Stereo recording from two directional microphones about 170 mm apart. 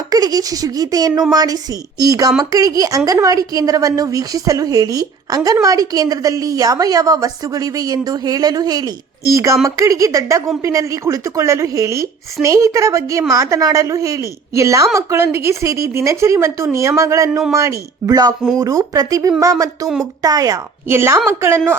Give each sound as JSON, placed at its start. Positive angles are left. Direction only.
{"t": 0.1, "sound": "a woman's voice", "side_deg": -20}